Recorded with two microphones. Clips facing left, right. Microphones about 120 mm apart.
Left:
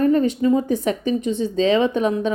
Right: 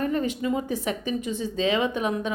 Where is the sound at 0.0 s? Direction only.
35° left (ahead or behind).